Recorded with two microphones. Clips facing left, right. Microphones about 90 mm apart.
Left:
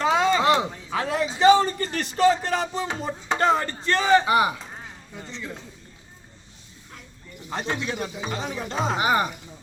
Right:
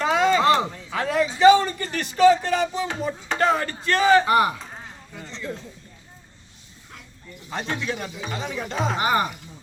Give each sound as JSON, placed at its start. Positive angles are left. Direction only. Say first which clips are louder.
{"t": 0.0, "sound": "a sound", "louder": "right 1 dB", "side_deg": 30}
{"t": 2.1, "sound": "a man's voice", "louder": "right 4 dB", "side_deg": 40}
{"t": 4.3, "sound": "speech", "louder": "right 1 dB", "side_deg": 15}
{"t": 7.5, "sound": "speech", "louder": "even", "side_deg": 35}
{"t": 9.0, "sound": "speech", "louder": "even", "side_deg": 15}